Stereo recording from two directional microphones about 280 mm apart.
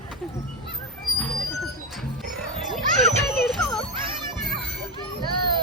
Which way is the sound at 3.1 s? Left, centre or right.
Right.